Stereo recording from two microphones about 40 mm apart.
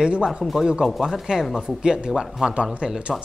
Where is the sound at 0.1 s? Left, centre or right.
Right.